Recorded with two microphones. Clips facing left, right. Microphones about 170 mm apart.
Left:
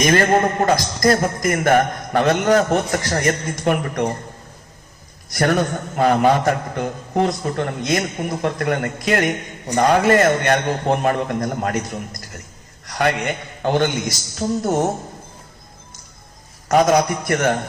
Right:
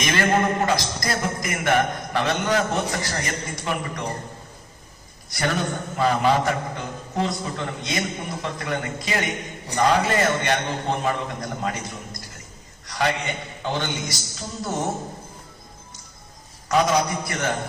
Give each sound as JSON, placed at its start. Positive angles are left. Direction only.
{"t": 0.0, "sound": "music", "side_deg": 45}
{"t": 5.4, "sound": "a man's voice", "side_deg": 50}
{"t": 14.3, "sound": "music", "side_deg": 55}
{"t": 16.6, "sound": "music", "side_deg": 45}